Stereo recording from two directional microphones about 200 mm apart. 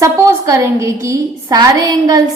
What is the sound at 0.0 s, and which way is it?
A woman's voice, 15° right (ahead or behind).